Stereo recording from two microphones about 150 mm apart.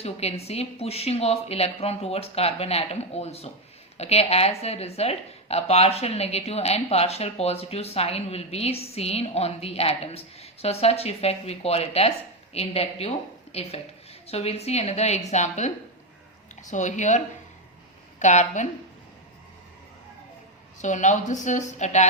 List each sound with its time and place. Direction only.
0.0 s a woman's voice: 45° left (ahead or behind)
20.8 s a woman's voice: 55° left (ahead or behind)